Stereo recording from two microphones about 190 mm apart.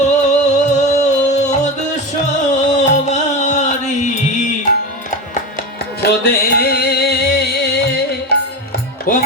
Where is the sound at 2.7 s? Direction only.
40° left (ahead or behind).